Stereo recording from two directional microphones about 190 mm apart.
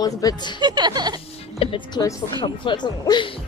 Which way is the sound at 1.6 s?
30° left (ahead or behind).